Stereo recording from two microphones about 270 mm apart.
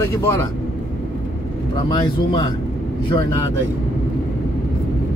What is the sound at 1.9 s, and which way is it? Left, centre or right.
Speech, centre.